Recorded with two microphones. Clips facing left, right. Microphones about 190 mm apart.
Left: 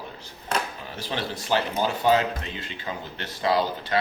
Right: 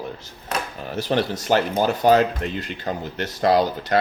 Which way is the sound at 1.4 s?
50° right (ahead or behind).